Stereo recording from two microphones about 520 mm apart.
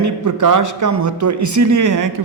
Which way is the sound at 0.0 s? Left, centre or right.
Right.